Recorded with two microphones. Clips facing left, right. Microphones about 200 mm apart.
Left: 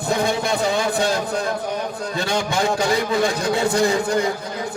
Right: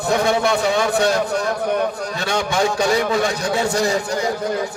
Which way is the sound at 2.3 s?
60° right (ahead or behind).